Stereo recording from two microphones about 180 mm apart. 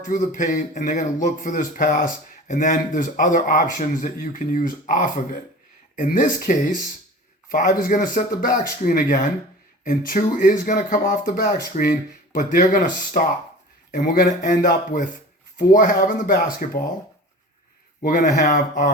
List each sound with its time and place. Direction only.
0.0 s speech: 45° left (ahead or behind)
18.0 s speech: 45° left (ahead or behind)